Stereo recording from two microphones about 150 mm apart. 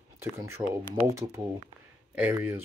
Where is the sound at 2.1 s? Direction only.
10° right (ahead or behind).